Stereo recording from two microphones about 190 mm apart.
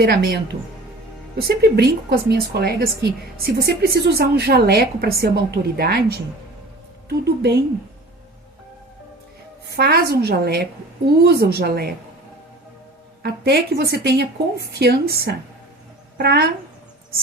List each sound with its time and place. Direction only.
0.0 s speech: 55° right (ahead or behind)
7.3 s speech: 55° right (ahead or behind)
9.7 s speech: 55° right (ahead or behind)
13.2 s speech: 60° right (ahead or behind)